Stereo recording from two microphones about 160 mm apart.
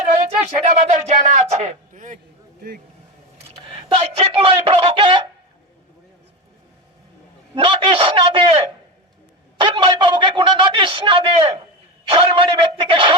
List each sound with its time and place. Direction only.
0.2 s speech: 45° right (ahead or behind)
3.6 s speech: 35° right (ahead or behind)
7.5 s a man's voice: 35° right (ahead or behind)